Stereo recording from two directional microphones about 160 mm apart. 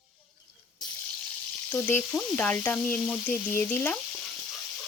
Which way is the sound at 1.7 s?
15° left (ahead or behind).